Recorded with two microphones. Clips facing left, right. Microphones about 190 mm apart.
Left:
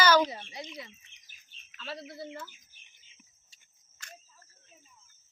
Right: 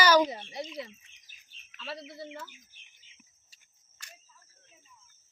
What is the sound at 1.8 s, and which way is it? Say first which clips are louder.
Speech: even; centre (ahead or behind).